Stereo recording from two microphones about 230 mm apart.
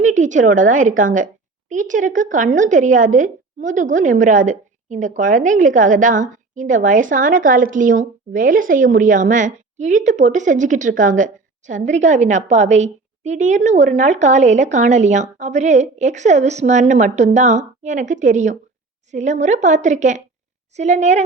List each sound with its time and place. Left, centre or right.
0.0 s a woman's voice: right